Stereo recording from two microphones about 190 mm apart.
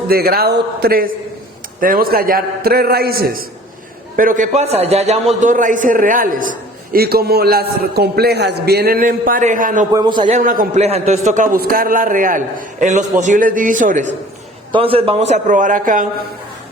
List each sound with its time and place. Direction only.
0.1 s a man's voice: 55° right (ahead or behind)
9.9 s a man's voice: 20° right (ahead or behind)
10.2 s a man's voice: 40° right (ahead or behind)
14.7 s a man's voice: 30° right (ahead or behind); by 16.0 s 45° right (ahead or behind)